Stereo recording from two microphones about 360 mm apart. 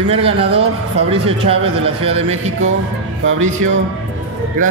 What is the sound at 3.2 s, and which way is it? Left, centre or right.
Speech, right.